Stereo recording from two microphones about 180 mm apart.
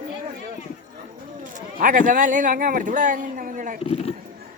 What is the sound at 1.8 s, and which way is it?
Speech, 50° right (ahead or behind).